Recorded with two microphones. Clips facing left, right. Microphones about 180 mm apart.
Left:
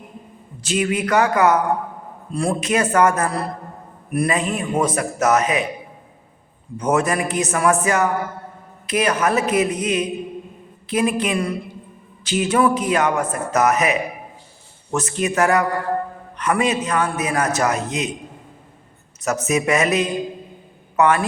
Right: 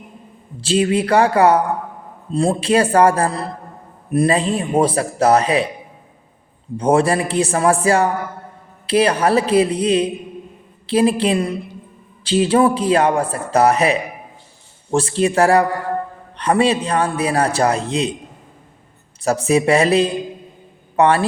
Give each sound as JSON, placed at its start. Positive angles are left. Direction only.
{"t": 0.6, "sound": "a man's voice", "side_deg": -30}
{"t": 6.7, "sound": "a man's voice", "side_deg": -30}
{"t": 19.2, "sound": "a man's voice", "side_deg": -30}